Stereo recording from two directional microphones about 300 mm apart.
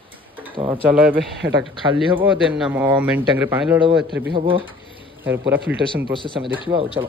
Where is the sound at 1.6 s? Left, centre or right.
Centre.